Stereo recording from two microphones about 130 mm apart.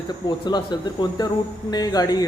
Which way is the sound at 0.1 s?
35° left (ahead or behind).